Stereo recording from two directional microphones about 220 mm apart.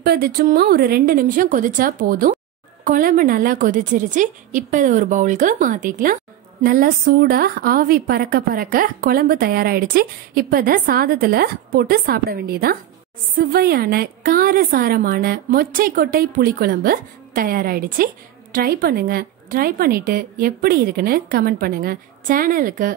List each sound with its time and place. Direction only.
0.0 s a woman's voice: 45° right (ahead or behind)